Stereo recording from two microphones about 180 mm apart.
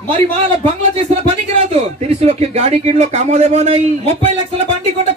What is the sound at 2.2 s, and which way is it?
A man's voice, 35° right (ahead or behind).